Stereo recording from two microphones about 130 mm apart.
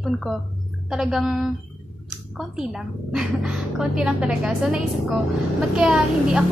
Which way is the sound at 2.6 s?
5° right (ahead or behind).